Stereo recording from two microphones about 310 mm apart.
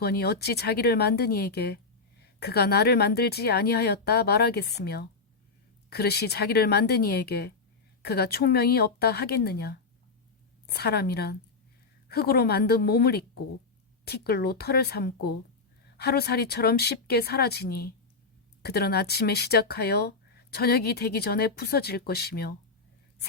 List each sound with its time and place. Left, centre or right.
0.0 s speech: left